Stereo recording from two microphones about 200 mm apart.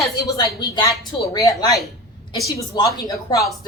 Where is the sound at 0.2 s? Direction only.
20° left (ahead or behind).